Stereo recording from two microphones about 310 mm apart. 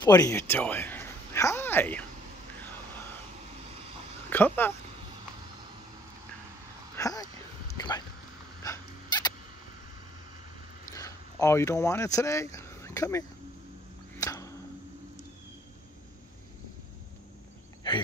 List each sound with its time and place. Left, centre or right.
0.0 s speech: centre
4.3 s speech: centre
7.0 s a sound: centre
8.6 s a sound: centre
11.0 s speech: centre
14.1 s arrow: centre